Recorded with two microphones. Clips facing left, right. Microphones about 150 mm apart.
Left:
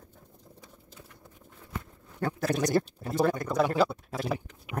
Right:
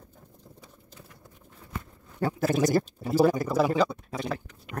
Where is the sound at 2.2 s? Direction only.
5° right (ahead or behind).